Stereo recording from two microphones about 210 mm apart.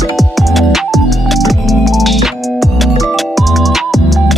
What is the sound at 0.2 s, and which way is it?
Music, centre (ahead or behind).